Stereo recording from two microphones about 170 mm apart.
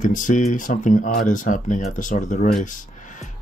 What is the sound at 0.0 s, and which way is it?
Speech, 50° left (ahead or behind).